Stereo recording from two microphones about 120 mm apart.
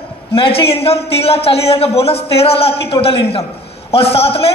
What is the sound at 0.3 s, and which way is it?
A man's voice, 50° left (ahead or behind).